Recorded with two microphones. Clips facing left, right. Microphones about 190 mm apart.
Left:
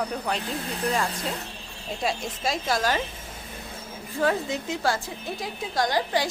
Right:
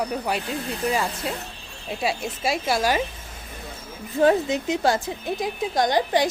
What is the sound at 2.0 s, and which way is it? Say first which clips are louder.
A woman's voice: right 2 dB; 5° right (ahead or behind).